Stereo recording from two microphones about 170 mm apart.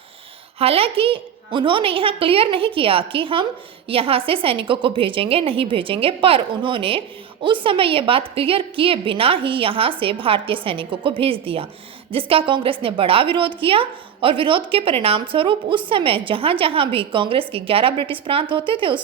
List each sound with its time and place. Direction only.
0.6 s a woman's voice: 35° right (ahead or behind)